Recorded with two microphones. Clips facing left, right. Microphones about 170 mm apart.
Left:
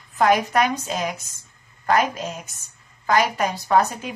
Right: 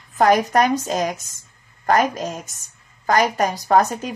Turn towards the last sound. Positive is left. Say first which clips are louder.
# right 2 dB
turn(degrees=-40)  # may be behind; listen again after turning